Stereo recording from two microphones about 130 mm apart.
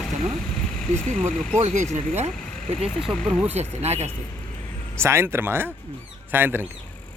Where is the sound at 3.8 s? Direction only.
55° right (ahead or behind).